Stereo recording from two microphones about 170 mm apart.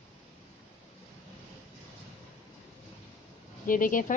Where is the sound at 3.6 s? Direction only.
55° left (ahead or behind).